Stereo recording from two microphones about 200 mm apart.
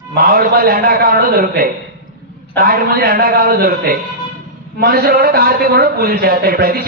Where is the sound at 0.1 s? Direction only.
50° right (ahead or behind).